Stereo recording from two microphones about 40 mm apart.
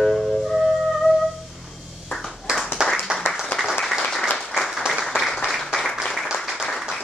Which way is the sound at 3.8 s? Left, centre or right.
Centre.